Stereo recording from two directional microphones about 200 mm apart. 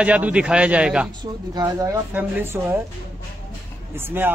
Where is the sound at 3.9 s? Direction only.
10° right (ahead or behind).